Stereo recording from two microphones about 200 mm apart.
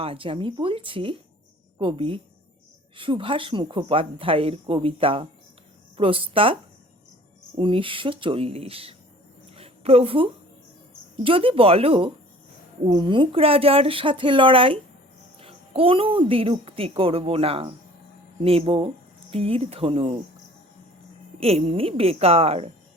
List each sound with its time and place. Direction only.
0.0 s speech: 25° right (ahead or behind)
9.6 s a sound: 30° right (ahead or behind)
11.2 s speech: 25° right (ahead or behind)
21.4 s speech: 30° right (ahead or behind)